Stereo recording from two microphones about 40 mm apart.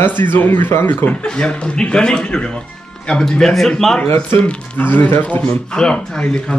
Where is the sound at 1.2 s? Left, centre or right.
Left.